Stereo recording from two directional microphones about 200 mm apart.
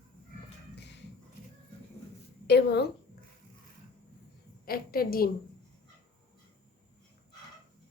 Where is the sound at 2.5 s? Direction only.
55° left (ahead or behind).